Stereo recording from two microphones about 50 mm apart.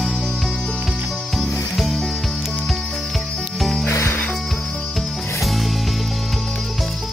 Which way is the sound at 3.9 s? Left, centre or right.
Left.